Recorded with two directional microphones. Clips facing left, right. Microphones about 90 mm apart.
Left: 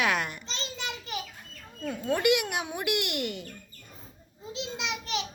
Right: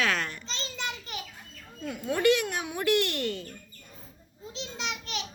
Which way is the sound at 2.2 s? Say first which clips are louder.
Right 3 dB; 15° left (ahead or behind).